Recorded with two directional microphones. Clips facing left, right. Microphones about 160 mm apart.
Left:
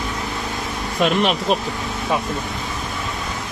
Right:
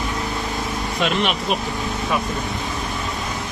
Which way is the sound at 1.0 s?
35° left (ahead or behind).